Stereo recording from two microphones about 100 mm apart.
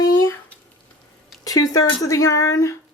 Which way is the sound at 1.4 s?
35° left (ahead or behind).